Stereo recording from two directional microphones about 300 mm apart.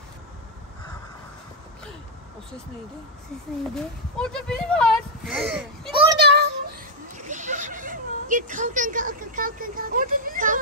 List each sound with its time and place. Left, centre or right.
3.7 s speech: centre
5.9 s child singing: centre
6.1 s child singing: right
7.2 s speech: right